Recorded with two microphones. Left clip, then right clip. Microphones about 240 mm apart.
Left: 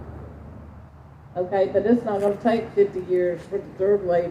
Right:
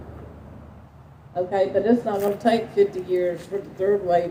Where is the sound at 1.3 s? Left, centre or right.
Right.